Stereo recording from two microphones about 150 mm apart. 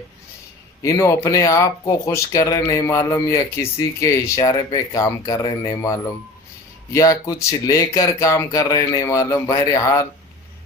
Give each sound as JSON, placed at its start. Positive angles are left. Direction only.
{"t": 0.8, "sound": "speech", "side_deg": 20}